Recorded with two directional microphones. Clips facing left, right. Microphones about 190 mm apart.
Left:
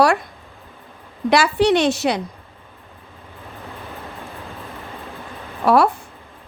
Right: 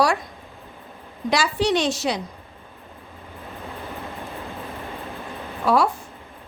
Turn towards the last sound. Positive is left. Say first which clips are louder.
# left 4 dB
turn(degrees=65)  # may be behind; listen again after turning